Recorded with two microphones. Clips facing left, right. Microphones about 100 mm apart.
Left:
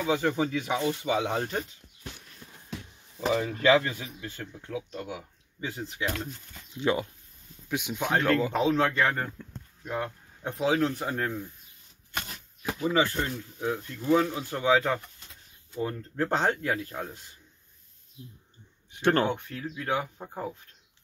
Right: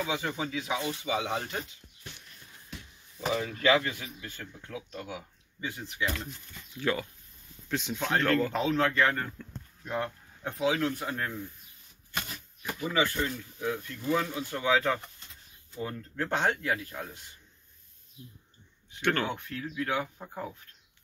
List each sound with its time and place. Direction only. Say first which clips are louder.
0.1 s speech: left 6 dB; 50° left (ahead or behind)
3.2 s a man's voice: left 4 dB; 30° left (ahead or behind)
9.4 s a sound: left 1 dB; 15° left (ahead or behind)
10.6 s speech: left 3 dB; 30° left (ahead or behind)
12.9 s speech: left 1 dB; 35° left (ahead or behind)
18.9 s speech: left 5 dB; 30° left (ahead or behind)